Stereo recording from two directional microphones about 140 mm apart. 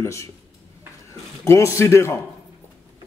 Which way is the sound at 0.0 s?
20° left (ahead or behind).